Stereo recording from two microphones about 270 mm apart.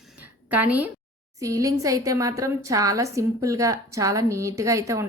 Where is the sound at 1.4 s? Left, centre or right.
Centre.